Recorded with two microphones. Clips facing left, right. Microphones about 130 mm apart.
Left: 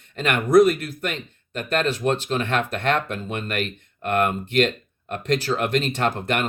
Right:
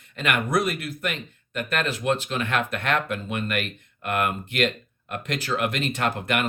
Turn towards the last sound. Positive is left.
turn(degrees=35)  # may be behind; listen again after turning